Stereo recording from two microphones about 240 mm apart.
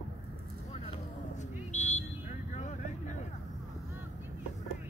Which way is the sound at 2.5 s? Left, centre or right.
Left.